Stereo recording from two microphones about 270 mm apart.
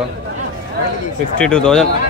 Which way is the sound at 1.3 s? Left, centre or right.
Centre.